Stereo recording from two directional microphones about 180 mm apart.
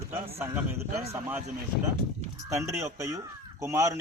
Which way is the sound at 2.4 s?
15° right (ahead or behind).